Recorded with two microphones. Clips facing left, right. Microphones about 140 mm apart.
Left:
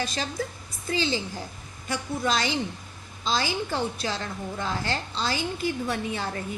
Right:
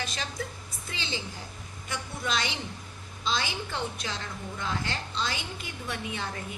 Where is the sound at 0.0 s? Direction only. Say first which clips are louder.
Left 5 dB; 35° left (ahead or behind).